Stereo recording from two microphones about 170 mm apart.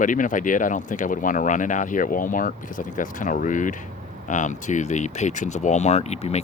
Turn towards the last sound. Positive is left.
turn(degrees=40)  # may be behind; listen again after turning